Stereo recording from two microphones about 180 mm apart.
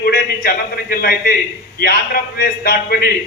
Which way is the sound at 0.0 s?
55° left (ahead or behind).